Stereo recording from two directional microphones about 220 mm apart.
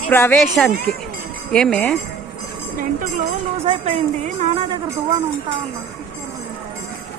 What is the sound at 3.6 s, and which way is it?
A woman's voice, 30° right (ahead or behind).